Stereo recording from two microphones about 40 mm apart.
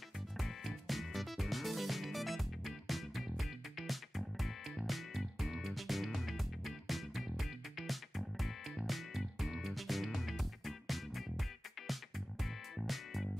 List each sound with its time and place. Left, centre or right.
0.4 s music: centre